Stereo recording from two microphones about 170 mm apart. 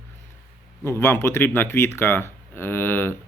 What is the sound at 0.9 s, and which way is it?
Speech, 15° left (ahead or behind).